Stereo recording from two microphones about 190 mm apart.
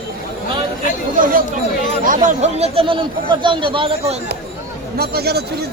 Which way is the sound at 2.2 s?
35° right (ahead or behind).